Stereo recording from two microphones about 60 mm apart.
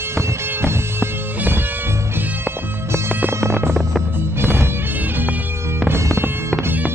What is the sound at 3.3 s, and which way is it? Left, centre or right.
Hum, right.